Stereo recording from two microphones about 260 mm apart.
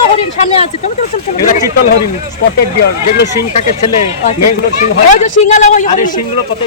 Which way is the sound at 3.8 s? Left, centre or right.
Left.